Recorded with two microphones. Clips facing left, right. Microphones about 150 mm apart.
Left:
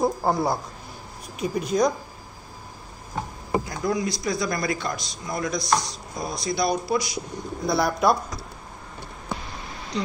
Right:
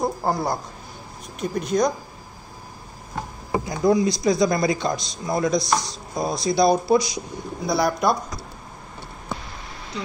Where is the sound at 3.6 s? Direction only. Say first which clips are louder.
Right 7 dB; 25° right (ahead or behind).